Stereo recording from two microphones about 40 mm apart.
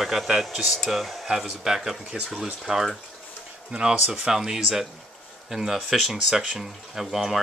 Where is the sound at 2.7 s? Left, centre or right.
Right.